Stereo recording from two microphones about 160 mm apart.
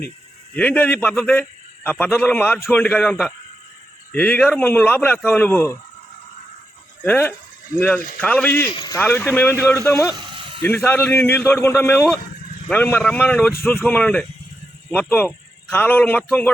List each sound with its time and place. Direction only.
0.5 s a man's voice: 10° left (ahead or behind)
7.0 s a man's voice: 10° left (ahead or behind)
8.7 s speech: 30° left (ahead or behind)
9.0 s a man's voice: 10° left (ahead or behind)